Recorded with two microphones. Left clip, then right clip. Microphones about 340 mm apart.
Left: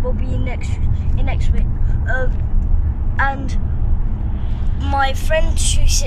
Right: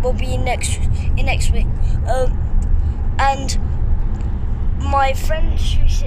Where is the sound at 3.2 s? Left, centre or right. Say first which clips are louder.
Right 3 dB; centre.